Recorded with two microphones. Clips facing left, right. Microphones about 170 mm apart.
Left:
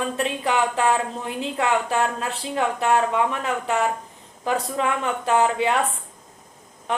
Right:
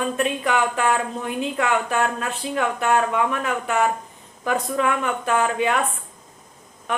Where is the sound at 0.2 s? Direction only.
25° left (ahead or behind).